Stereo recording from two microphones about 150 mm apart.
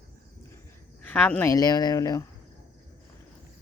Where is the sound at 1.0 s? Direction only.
10° left (ahead or behind).